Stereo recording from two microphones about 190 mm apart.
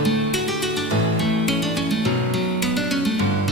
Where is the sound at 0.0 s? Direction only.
Centre (ahead or behind).